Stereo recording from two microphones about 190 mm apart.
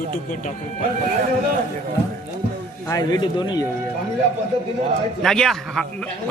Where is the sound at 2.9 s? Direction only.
20° left (ahead or behind).